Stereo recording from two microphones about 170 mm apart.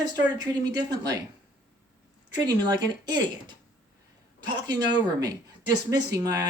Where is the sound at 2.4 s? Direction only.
25° right (ahead or behind).